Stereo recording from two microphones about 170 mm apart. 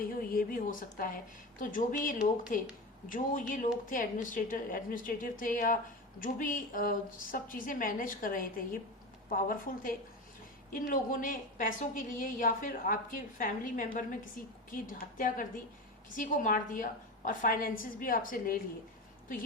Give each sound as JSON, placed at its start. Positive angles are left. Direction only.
{"t": 0.2, "sound": "a woman's voice", "side_deg": 55}